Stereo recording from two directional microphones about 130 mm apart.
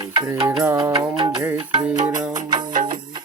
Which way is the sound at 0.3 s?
20° right (ahead or behind).